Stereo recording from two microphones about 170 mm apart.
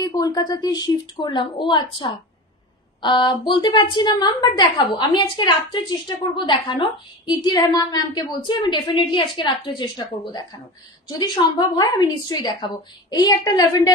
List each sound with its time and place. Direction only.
0.0 s a woman's voice: 20° left (ahead or behind)
11.7 s a woman's voice: 25° left (ahead or behind)